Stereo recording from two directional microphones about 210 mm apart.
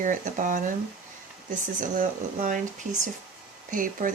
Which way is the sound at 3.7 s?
40° right (ahead or behind).